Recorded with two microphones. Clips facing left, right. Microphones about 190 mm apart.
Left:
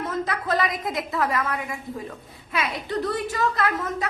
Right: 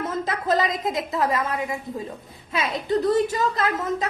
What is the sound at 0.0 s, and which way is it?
A woman's voice, 25° right (ahead or behind).